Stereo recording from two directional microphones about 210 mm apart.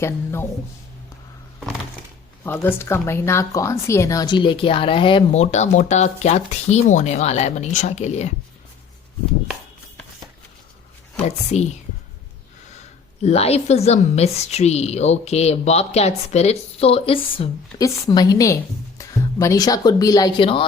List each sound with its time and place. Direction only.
0.0 s speech: 10° left (ahead or behind)
2.4 s a woman's voice: 10° left (ahead or behind); by 8.3 s 35° left (ahead or behind)
11.3 s a woman's voice: 30° left (ahead or behind)
13.2 s a woman's voice: 30° left (ahead or behind)